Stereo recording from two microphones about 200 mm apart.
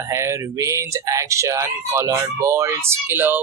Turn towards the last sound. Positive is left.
turn(degrees=-10)  # may be behind; listen again after turning